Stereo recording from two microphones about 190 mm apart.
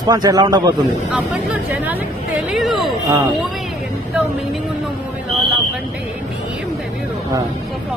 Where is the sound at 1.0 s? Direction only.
5° right (ahead or behind).